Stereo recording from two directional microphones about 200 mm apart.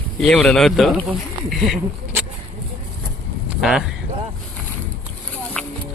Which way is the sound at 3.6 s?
Centre (ahead or behind).